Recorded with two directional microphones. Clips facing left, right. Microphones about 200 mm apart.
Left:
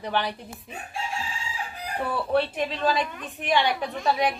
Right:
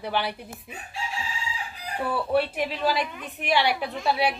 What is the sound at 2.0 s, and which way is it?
A woman's voice, 10° right (ahead or behind).